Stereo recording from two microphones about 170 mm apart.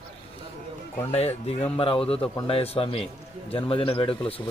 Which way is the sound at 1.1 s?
35° left (ahead or behind).